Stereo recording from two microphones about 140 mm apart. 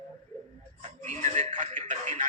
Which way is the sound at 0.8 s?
55° right (ahead or behind).